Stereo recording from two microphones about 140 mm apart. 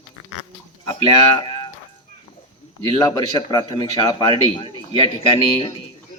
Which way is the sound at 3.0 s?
30° left (ahead or behind).